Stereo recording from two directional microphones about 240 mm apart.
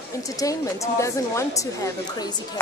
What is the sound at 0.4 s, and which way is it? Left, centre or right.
Speech, centre.